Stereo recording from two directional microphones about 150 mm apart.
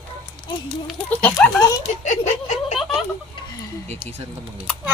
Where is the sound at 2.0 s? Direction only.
50° left (ahead or behind).